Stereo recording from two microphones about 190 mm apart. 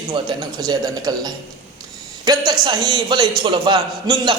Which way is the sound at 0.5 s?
20° right (ahead or behind).